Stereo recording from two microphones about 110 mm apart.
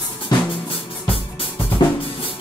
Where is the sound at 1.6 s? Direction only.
55° left (ahead or behind).